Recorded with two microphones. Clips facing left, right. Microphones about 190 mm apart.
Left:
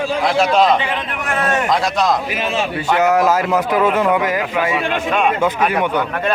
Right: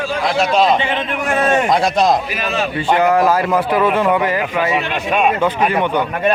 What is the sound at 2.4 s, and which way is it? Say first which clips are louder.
Speech: left 1 dB; 25° left (ahead or behind).